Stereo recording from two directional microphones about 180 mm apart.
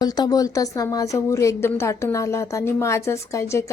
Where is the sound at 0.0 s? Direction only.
20° left (ahead or behind).